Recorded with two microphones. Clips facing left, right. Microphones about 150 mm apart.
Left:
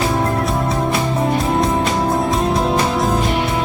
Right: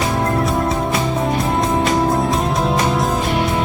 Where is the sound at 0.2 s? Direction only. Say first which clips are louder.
Right 1 dB; centre (ahead or behind).